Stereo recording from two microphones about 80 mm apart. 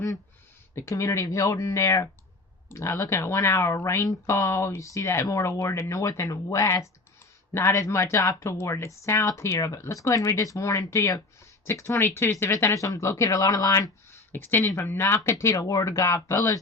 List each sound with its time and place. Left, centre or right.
0.8 s speech: left
14.1 s a sound: left
14.7 s speech: left